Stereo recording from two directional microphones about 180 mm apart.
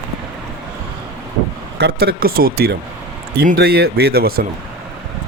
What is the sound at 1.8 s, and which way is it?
Speech, 60° right (ahead or behind).